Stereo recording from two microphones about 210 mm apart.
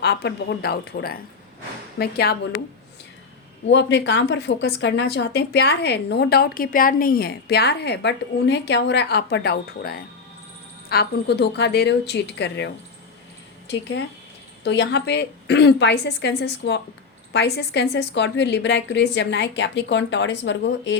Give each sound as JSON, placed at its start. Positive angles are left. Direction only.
{"t": 0.0, "sound": "a woman's voice", "side_deg": 50}
{"t": 3.7, "sound": "a woman's voice", "side_deg": 60}
{"t": 14.6, "sound": "a woman's voice", "side_deg": 55}